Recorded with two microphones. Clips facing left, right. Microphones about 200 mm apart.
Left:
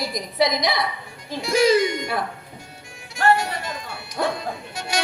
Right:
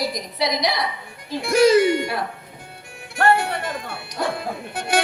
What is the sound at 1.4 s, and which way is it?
Speech, 55° right (ahead or behind).